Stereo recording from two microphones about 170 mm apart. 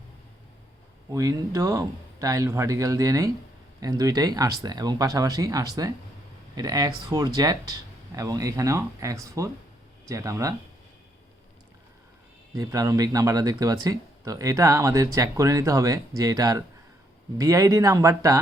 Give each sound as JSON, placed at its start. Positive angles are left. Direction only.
{"t": 1.1, "sound": "speech", "side_deg": -20}
{"t": 12.5, "sound": "speech", "side_deg": -20}